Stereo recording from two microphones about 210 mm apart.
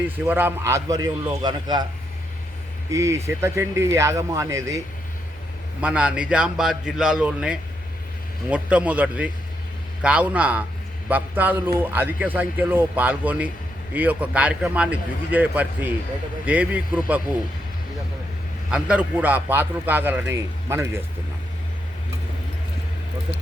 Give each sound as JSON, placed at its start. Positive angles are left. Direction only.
{"t": 0.3, "sound": "a man's voice", "side_deg": -10}
{"t": 2.9, "sound": "a man's voice", "side_deg": -15}
{"t": 5.8, "sound": "a man's voice", "side_deg": -5}
{"t": 18.7, "sound": "a man's voice", "side_deg": -5}